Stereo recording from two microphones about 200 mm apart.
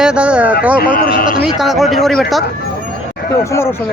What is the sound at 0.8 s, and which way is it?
Speech, 45° left (ahead or behind).